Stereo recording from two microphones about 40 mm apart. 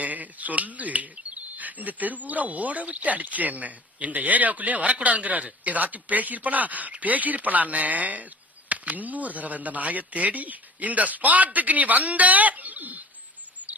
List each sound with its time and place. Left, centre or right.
0.0 s speech: right